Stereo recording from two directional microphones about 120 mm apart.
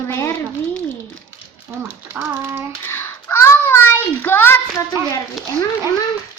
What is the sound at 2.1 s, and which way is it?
Speech, 15° right (ahead or behind).